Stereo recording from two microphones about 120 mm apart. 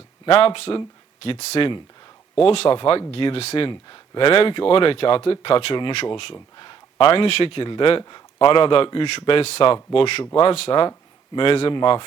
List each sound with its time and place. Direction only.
0.3 s speech: 50° left (ahead or behind)
3.7 s speech: 40° left (ahead or behind)